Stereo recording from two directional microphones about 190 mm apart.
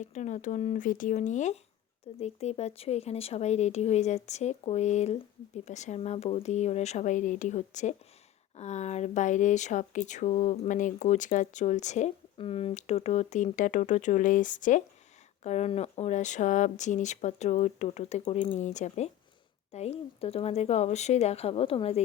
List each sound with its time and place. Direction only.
0.0 s speech: 40° left (ahead or behind)